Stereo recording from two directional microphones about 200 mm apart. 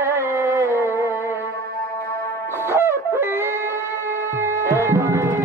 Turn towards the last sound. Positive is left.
turn(degrees=-15)  # may be behind; listen again after turning